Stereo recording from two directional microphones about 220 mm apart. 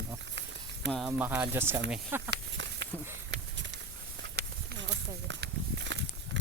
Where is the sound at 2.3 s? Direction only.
55° right (ahead or behind).